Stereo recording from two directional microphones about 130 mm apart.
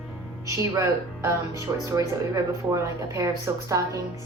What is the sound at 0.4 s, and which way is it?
Speech, 25° right (ahead or behind).